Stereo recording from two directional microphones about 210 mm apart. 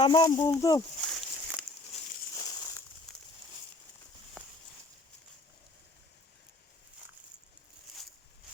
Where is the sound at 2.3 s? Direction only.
15° left (ahead or behind).